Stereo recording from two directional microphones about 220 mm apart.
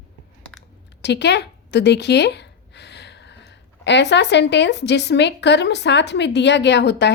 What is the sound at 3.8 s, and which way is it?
A woman's voice, 50° left (ahead or behind).